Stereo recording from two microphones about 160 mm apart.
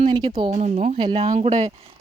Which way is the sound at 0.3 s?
30° right (ahead or behind).